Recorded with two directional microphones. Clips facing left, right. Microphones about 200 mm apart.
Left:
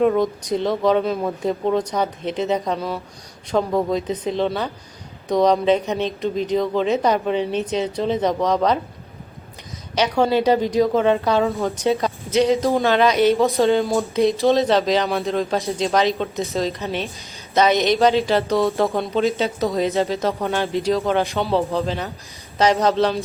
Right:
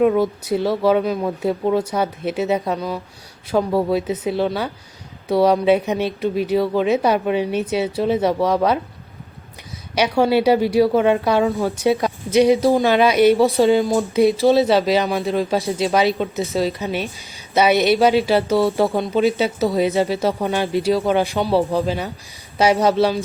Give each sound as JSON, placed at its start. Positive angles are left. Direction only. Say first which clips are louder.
{"t": 0.0, "sound": "speech", "louder": "right 1 dB", "side_deg": -5}
{"t": 9.9, "sound": "speech", "louder": "right 2 dB", "side_deg": -10}
{"t": 11.4, "sound": "speech", "louder": "right 2 dB", "side_deg": 0}
{"t": 11.8, "sound": "speech", "louder": "right 2 dB", "side_deg": -15}
{"t": 13.7, "sound": "speech", "louder": "right 2 dB", "side_deg": 0}
{"t": 15.8, "sound": "speech", "louder": "right 1 dB", "side_deg": -10}
{"t": 19.1, "sound": "speech", "louder": "right 2 dB", "side_deg": -15}